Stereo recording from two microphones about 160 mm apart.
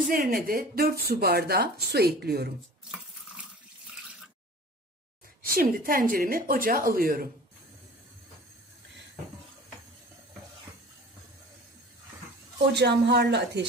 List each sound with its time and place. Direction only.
0.1 s speech: 60° right (ahead or behind); by 2.5 s 85° right
5.4 s speech: 65° right (ahead or behind)
12.7 s speech: 90° right